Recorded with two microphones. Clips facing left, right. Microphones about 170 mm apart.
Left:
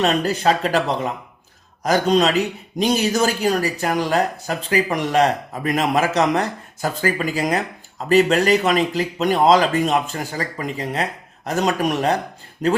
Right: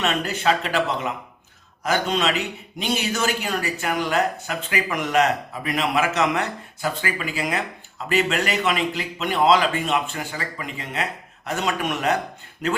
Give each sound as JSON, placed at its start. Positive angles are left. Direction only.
{"t": 0.0, "sound": "a man's voice", "side_deg": 35}